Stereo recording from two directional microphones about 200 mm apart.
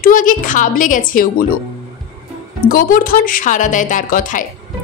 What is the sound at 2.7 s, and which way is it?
A woman's voice, 45° left (ahead or behind).